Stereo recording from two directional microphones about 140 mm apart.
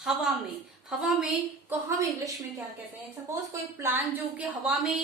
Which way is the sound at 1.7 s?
20° right (ahead or behind).